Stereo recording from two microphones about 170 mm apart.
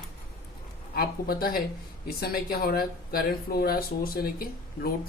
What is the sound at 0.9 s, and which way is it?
Speech, 60° left (ahead or behind).